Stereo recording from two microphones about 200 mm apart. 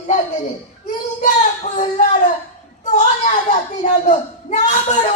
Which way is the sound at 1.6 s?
35° left (ahead or behind).